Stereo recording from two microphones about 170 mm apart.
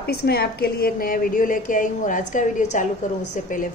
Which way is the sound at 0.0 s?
65° left (ahead or behind).